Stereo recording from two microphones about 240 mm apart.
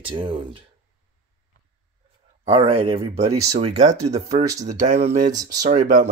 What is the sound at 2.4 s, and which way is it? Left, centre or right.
Speech, right.